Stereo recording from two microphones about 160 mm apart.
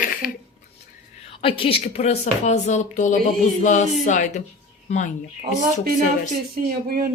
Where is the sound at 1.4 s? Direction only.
35° left (ahead or behind); by 5.1 s 50° left (ahead or behind).